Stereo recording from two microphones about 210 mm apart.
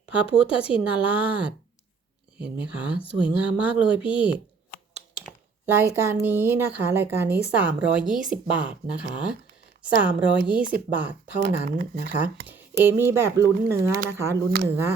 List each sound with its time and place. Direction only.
0.0 s a woman's voice: 5° right (ahead or behind)
10.6 s speech: 40° right (ahead or behind)
10.9 s speech: 10° right (ahead or behind)
11.3 s speech: 50° right (ahead or behind)
12.8 s speech: 10° right (ahead or behind)